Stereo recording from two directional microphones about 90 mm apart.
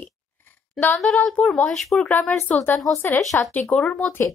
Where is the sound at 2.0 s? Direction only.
20° left (ahead or behind).